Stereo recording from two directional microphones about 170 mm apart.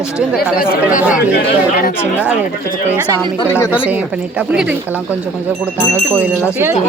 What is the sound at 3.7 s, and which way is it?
A woman's voice, 10° right (ahead or behind).